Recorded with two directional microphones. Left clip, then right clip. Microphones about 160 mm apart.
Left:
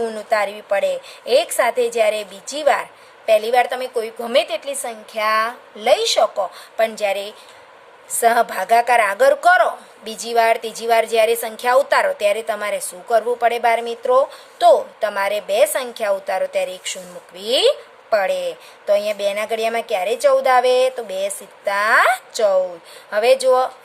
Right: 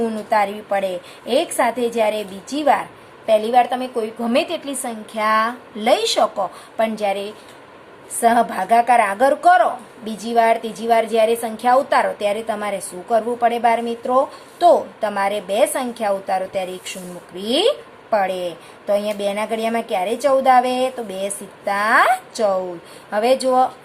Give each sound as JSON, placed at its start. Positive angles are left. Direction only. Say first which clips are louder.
{"t": 0.0, "sound": "a woman's voice", "louder": "right 1 dB", "side_deg": 45}
{"t": 6.8, "sound": "a woman's voice", "louder": "left 1 dB", "side_deg": 50}